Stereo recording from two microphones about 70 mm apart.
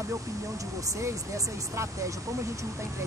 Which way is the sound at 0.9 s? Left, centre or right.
Right.